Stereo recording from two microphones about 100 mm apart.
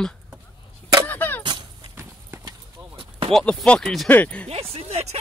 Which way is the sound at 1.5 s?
45° right (ahead or behind).